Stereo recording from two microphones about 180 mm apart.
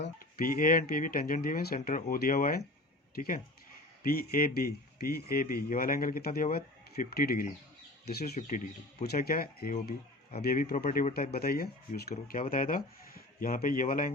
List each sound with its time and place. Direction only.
0.3 s speech: 50° left (ahead or behind)
8.4 s speech: 45° left (ahead or behind)